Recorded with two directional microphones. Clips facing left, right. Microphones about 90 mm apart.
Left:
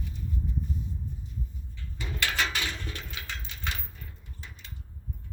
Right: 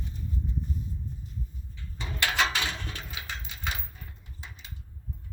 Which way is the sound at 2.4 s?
80° right.